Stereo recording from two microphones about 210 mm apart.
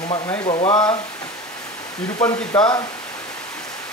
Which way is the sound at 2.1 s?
20° left (ahead or behind).